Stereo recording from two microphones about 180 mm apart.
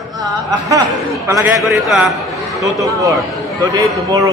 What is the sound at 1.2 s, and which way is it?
Speech, 15° right (ahead or behind).